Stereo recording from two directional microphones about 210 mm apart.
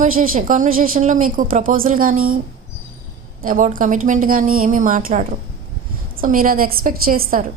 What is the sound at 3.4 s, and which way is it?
A woman's voice, 40° right (ahead or behind).